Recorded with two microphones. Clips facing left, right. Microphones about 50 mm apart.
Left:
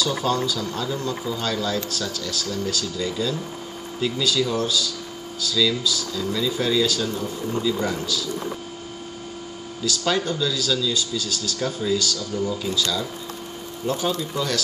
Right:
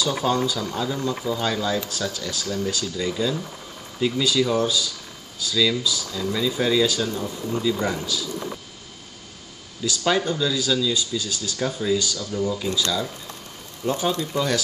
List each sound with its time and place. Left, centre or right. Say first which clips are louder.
0.0 s speech: right 1 dB; centre
5.5 s speech: even; centre
9.8 s speech: right 1 dB; centre
11.6 s speech: right 1 dB; centre
13.8 s speech: right 1 dB; centre